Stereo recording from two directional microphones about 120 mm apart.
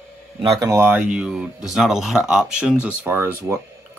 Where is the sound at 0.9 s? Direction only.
10° right (ahead or behind).